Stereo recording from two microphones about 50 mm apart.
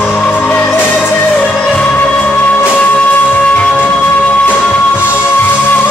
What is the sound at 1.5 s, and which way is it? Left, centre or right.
Music, centre.